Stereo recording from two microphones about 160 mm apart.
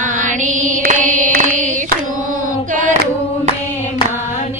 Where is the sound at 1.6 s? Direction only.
55° right (ahead or behind).